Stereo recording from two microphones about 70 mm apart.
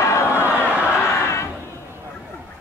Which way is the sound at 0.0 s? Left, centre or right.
Left.